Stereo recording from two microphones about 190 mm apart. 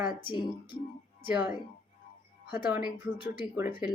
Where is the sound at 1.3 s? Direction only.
10° right (ahead or behind).